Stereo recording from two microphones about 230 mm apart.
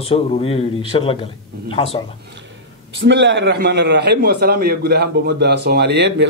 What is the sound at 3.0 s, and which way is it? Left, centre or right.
A man's voice, right.